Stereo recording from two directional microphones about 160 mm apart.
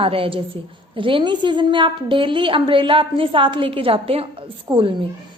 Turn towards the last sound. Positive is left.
turn(degrees=-30)  # may be behind; listen again after turning